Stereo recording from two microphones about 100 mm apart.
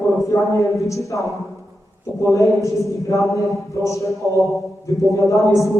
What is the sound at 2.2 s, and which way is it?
A man's voice, 30° left (ahead or behind).